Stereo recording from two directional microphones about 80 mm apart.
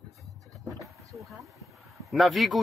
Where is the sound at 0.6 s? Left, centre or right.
Right.